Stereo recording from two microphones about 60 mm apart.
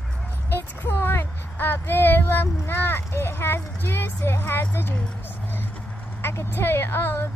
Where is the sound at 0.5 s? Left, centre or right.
Left.